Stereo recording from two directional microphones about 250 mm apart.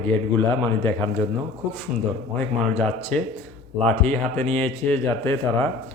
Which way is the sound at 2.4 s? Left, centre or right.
Centre.